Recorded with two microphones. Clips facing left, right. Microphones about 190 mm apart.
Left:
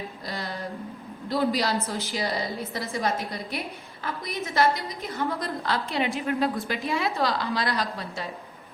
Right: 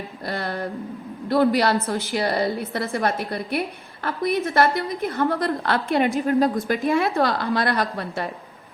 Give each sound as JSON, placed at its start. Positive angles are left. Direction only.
{"t": 0.3, "sound": "a woman's voice", "side_deg": -60}
{"t": 6.1, "sound": "a woman's voice", "side_deg": -40}
{"t": 6.8, "sound": "a woman's voice", "side_deg": -55}